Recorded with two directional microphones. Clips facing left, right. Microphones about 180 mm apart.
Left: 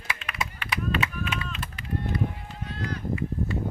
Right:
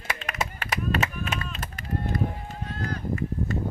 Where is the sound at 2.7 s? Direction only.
45° right (ahead or behind).